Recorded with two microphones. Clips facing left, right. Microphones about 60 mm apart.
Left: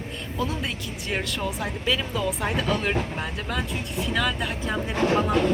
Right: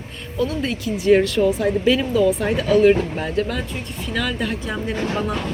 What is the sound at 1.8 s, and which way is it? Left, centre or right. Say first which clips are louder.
Speech: right 6 dB; centre.